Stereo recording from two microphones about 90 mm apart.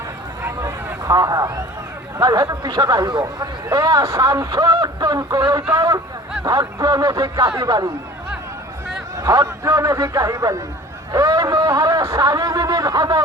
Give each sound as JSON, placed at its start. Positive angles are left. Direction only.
{"t": 1.0, "sound": "speech", "side_deg": -45}
{"t": 9.1, "sound": "speech", "side_deg": -35}
{"t": 11.6, "sound": "speech", "side_deg": -35}